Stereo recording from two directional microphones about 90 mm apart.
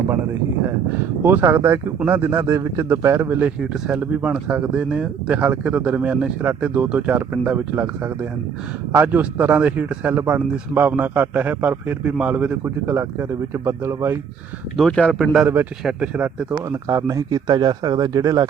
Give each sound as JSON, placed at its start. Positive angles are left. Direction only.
{"t": 1.2, "sound": "speech", "side_deg": -25}
{"t": 3.6, "sound": "speech", "side_deg": -10}
{"t": 12.6, "sound": "speech", "side_deg": -25}
{"t": 14.8, "sound": "speech", "side_deg": 10}
{"t": 16.5, "sound": "speech", "side_deg": -35}